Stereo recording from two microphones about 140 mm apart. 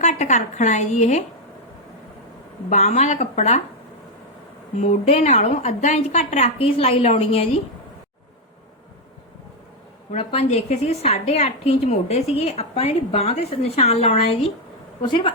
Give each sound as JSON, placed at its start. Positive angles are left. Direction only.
{"t": 0.0, "sound": "a woman's voice", "side_deg": 55}
{"t": 2.6, "sound": "a woman's voice", "side_deg": 55}
{"t": 4.8, "sound": "a woman's voice", "side_deg": 50}
{"t": 10.1, "sound": "a woman's voice", "side_deg": 50}